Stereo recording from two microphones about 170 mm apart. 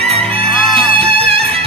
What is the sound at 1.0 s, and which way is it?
Music, 35° right (ahead or behind).